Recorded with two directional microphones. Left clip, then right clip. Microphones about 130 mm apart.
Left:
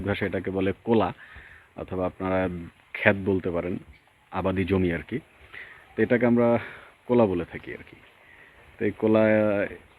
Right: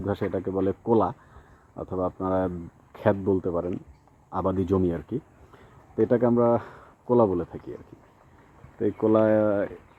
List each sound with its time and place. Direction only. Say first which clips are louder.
0.0 s speech: even; 20° left (ahead or behind)
9.0 s speech: even; 20° left (ahead or behind)